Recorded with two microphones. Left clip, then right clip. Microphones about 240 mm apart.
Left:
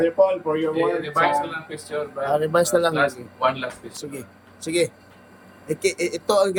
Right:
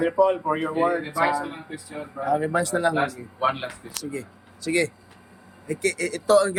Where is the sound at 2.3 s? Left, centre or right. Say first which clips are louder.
Left 4 dB; centre.